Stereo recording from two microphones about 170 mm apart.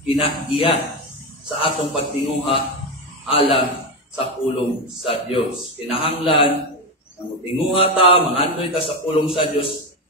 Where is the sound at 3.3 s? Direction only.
35° left (ahead or behind).